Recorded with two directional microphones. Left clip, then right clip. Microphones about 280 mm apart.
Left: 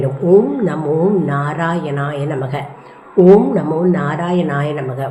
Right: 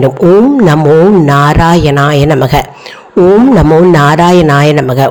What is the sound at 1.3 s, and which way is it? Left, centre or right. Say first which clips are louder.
Speech: right 12 dB; right.